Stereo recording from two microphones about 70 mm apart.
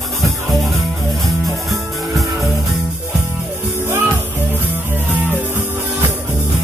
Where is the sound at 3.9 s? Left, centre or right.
Right.